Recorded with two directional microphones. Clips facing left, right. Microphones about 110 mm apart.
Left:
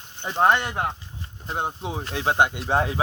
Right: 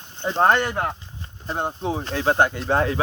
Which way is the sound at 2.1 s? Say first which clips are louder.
Right 1 dB; 20° left (ahead or behind).